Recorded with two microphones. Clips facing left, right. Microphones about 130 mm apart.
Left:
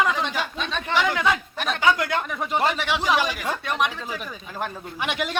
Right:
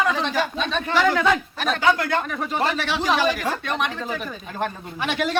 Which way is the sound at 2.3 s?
15° left (ahead or behind).